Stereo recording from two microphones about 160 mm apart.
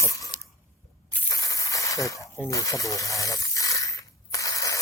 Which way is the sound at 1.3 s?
20° left (ahead or behind).